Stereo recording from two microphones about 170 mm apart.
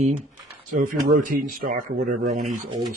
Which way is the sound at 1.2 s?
55° right (ahead or behind).